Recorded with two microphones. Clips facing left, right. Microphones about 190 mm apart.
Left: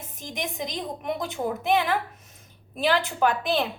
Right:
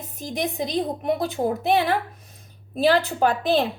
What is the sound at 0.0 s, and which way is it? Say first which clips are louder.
A woman's voice: right 6 dB; 35° right (ahead or behind).